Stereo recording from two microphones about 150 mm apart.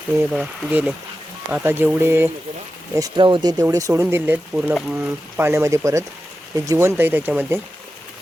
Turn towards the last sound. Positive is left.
turn(degrees=-15)  # may be behind; listen again after turning